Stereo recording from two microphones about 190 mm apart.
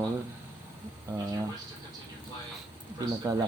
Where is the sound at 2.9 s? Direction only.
20° right (ahead or behind).